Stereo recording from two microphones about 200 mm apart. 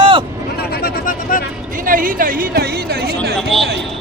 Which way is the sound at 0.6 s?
50° left (ahead or behind).